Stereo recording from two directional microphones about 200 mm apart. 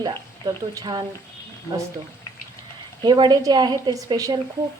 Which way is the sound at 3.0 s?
20° right (ahead or behind).